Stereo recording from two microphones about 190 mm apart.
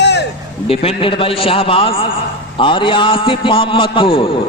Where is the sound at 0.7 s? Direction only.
30° left (ahead or behind).